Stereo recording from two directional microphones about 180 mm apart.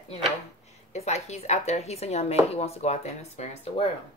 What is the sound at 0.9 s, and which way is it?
Speech, 40° left (ahead or behind).